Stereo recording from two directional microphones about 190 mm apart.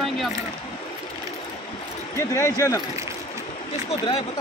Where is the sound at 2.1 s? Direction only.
15° left (ahead or behind).